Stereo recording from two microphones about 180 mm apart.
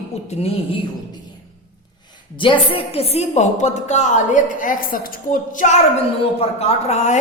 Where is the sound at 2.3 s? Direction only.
25° left (ahead or behind); by 5.7 s 45° left (ahead or behind).